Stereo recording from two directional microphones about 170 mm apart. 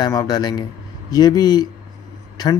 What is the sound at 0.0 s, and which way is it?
Speech, 20° left (ahead or behind).